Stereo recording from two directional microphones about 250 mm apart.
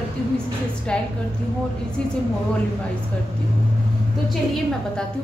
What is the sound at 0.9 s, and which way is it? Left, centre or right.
Speech, centre.